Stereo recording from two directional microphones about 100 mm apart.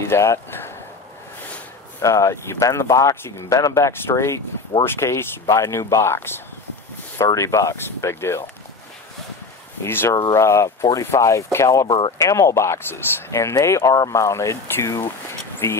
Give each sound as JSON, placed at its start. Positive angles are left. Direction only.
{"t": 0.0, "sound": "speech", "side_deg": 30}
{"t": 2.0, "sound": "speech", "side_deg": 30}
{"t": 9.8, "sound": "speech", "side_deg": 25}